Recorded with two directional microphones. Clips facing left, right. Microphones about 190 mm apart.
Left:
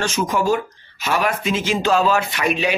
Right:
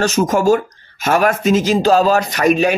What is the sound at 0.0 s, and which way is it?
Speech, 45° right (ahead or behind).